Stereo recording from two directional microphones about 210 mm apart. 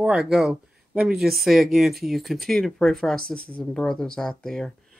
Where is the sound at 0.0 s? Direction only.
5° right (ahead or behind).